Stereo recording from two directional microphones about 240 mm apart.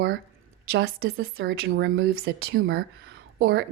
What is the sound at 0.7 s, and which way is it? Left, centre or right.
A woman's voice, right.